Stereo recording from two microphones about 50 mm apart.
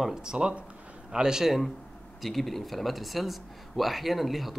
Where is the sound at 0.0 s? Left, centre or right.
Centre.